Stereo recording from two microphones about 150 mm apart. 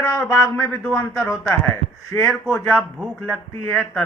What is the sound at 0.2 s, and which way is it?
Speech, 15° left (ahead or behind).